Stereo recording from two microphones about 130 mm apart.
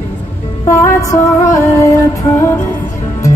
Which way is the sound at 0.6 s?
25° left (ahead or behind).